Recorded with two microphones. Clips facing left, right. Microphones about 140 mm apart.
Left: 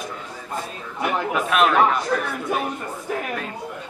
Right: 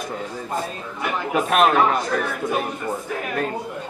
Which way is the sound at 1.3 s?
40° right (ahead or behind).